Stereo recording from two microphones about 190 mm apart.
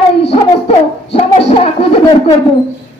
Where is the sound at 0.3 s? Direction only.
30° left (ahead or behind).